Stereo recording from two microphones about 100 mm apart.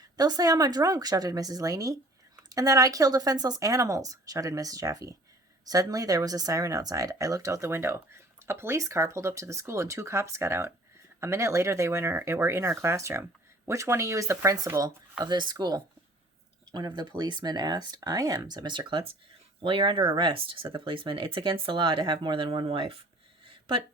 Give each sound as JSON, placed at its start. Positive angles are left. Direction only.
{"t": 0.2, "sound": "speech", "side_deg": -40}
{"t": 15.2, "sound": "speech", "side_deg": -45}
{"t": 23.5, "sound": "a sound", "side_deg": -60}